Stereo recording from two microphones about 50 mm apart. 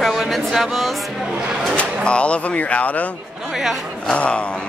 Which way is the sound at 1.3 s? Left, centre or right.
Centre.